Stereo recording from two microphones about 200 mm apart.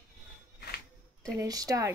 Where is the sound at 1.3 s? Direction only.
15° right (ahead or behind).